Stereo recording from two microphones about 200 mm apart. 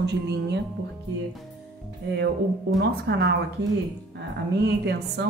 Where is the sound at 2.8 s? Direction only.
55° right (ahead or behind).